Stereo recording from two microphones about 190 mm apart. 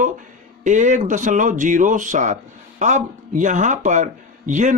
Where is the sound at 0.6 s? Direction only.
40° right (ahead or behind).